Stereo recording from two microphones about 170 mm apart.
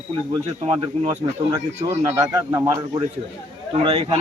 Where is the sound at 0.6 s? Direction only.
35° right (ahead or behind).